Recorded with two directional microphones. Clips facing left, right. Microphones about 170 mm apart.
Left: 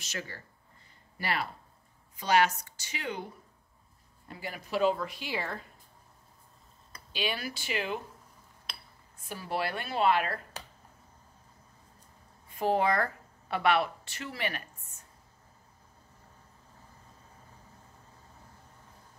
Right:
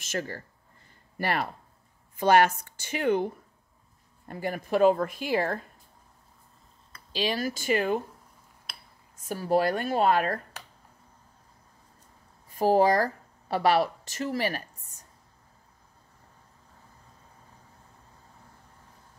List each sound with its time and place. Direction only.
0.0 s speech: 50° right (ahead or behind)
4.3 s speech: 50° right (ahead or behind)
7.1 s speech: 35° right (ahead or behind)
9.2 s speech: 40° right (ahead or behind)
12.4 s speech: 40° right (ahead or behind)